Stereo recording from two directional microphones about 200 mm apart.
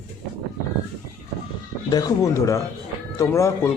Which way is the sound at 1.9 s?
15° left (ahead or behind).